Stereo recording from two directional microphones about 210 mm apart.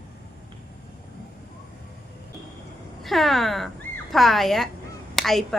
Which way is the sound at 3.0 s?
Centre (ahead or behind).